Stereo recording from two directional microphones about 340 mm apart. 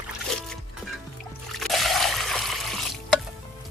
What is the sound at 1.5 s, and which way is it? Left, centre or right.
Trickle, centre.